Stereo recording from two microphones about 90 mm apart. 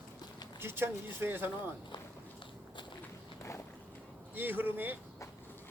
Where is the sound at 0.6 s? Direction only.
25° right (ahead or behind).